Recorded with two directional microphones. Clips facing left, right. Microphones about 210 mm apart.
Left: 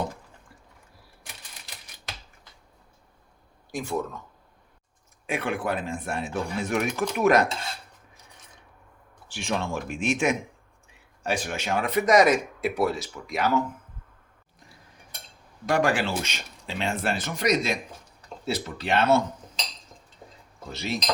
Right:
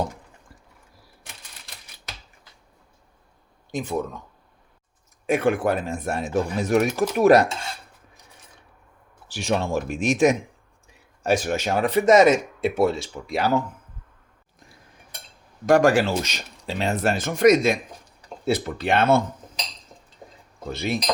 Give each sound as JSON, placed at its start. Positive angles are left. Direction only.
{"t": 3.7, "sound": "speech", "side_deg": -20}
{"t": 5.2, "sound": "speech", "side_deg": -45}
{"t": 9.3, "sound": "speech", "side_deg": -40}
{"t": 15.6, "sound": "speech", "side_deg": -45}
{"t": 20.7, "sound": "speech", "side_deg": -55}